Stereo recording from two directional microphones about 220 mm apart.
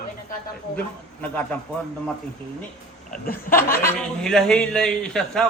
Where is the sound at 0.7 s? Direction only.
5° left (ahead or behind).